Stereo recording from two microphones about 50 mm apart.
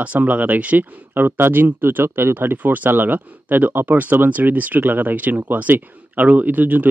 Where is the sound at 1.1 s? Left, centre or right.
Right.